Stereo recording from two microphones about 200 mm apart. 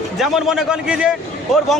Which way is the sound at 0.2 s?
Centre (ahead or behind).